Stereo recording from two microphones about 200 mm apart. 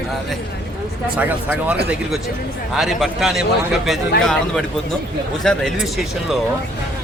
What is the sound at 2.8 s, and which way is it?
A man's voice, centre (ahead or behind).